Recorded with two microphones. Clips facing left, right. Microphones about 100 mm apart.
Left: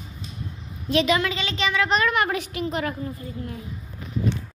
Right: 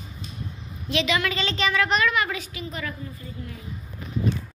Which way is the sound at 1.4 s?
15° left (ahead or behind).